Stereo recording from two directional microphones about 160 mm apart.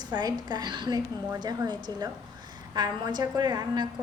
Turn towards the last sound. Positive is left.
turn(degrees=-25)  # may be behind; listen again after turning